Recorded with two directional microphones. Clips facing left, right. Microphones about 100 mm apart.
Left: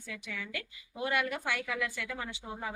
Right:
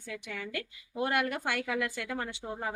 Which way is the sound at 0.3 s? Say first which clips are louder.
Right 2 dB; 45° right (ahead or behind).